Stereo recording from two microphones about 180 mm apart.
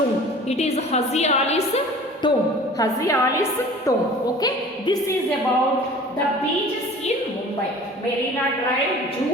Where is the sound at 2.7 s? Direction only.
20° left (ahead or behind).